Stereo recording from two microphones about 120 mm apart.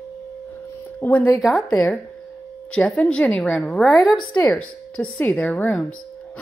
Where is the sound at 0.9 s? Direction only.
15° left (ahead or behind).